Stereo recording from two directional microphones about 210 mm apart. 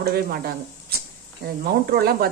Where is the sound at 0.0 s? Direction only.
45° right (ahead or behind).